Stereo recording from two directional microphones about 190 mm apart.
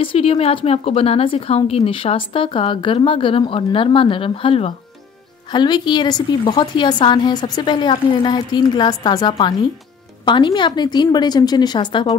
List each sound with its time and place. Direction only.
0.0 s a woman's voice: 30° left (ahead or behind)